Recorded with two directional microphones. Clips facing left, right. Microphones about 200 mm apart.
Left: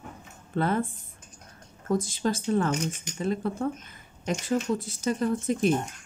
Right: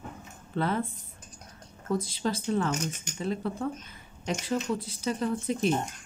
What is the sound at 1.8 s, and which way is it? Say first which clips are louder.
Speech: left 3 dB; 45° left (ahead or behind).